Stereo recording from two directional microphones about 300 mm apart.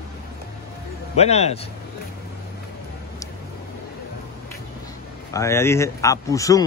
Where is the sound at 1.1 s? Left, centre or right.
Left.